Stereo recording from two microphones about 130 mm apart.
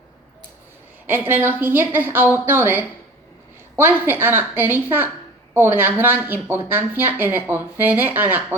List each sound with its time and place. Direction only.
1.0 s speech: 15° right (ahead or behind)